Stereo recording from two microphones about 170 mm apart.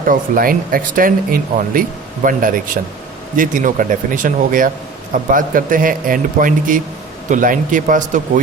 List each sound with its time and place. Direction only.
0.0 s speech: 55° right (ahead or behind)